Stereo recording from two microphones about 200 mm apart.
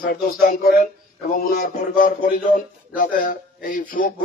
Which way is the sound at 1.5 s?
40° left (ahead or behind).